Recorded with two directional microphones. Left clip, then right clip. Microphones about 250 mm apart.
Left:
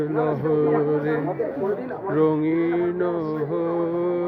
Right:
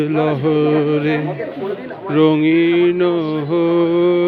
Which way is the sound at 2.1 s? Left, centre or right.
Right.